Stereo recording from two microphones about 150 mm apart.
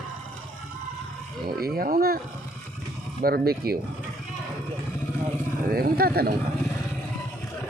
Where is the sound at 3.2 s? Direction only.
90° right.